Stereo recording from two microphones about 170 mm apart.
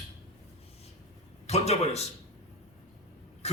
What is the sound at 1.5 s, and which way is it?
Speech, 40° left (ahead or behind).